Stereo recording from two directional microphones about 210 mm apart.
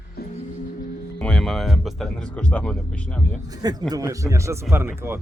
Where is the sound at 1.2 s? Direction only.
5° left (ahead or behind).